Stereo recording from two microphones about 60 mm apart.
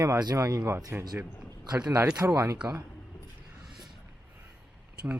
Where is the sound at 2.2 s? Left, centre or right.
Right.